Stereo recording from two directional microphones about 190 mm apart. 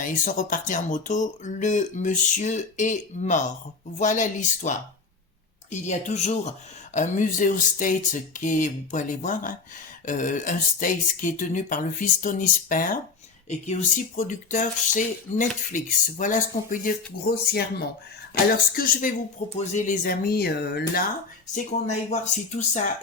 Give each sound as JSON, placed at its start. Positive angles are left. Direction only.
{"t": 0.0, "sound": "speech", "side_deg": 45}
{"t": 17.5, "sound": "speech", "side_deg": 55}
{"t": 21.5, "sound": "speech", "side_deg": 40}